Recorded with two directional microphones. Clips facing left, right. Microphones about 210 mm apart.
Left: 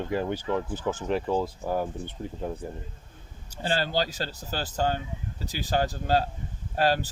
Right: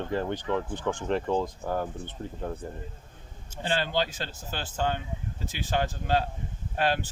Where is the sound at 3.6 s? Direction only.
40° left (ahead or behind).